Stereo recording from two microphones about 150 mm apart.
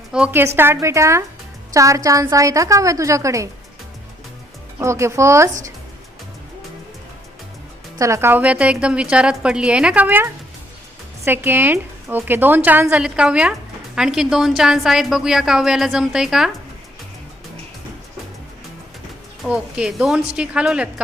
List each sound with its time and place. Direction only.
0.1 s a woman's voice: 10° right (ahead or behind)
4.8 s a woman's voice: 20° right (ahead or behind)
7.9 s a woman's voice: 20° right (ahead or behind)
11.3 s speech: 15° right (ahead or behind)
19.4 s a woman's voice: 5° right (ahead or behind)